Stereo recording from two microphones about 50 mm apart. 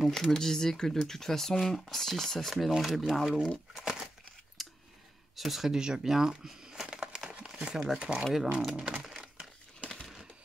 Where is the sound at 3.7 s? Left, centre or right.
Centre.